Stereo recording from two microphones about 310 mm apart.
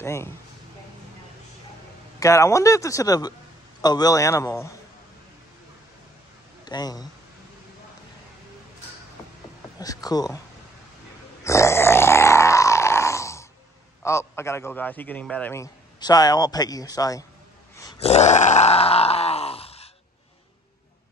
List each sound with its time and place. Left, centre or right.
0.0 s speech: centre
2.1 s a man's voice: centre
6.6 s speech: centre
9.8 s a man's voice: centre
11.4 s a sound: centre
14.0 s a man's voice: centre
17.7 s groan: centre